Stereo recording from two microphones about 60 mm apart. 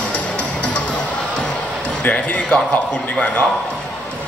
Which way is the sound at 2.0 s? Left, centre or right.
Left.